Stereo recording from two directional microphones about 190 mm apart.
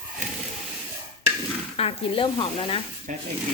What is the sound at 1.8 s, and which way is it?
Speech, 30° left (ahead or behind).